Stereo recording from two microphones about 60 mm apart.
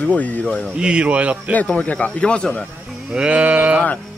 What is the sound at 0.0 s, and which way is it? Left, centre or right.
Speech, left.